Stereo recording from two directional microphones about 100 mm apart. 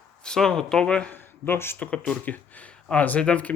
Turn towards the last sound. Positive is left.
turn(degrees=15)  # may be behind; listen again after turning